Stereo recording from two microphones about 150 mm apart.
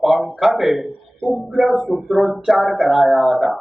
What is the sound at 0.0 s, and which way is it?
A man's voice, centre (ahead or behind).